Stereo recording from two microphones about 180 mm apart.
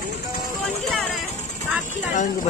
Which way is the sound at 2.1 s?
45° left (ahead or behind).